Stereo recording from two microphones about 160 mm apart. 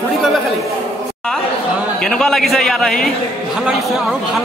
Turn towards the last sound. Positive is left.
turn(degrees=5)  # may be behind; listen again after turning